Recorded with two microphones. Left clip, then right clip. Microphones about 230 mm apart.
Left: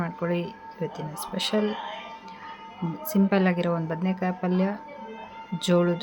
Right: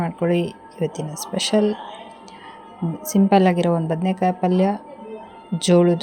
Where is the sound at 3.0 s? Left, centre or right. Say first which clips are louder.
Right 8 dB; centre.